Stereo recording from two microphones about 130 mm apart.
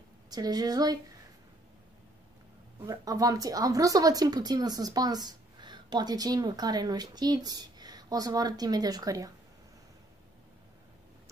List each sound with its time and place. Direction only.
0.3 s speech: 30° right (ahead or behind)
2.9 s speech: 25° right (ahead or behind)